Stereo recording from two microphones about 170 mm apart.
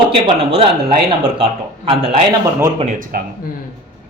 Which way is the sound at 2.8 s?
50° right (ahead or behind).